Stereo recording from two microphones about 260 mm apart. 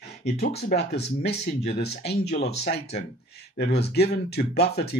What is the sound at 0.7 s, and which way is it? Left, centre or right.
Speech, left.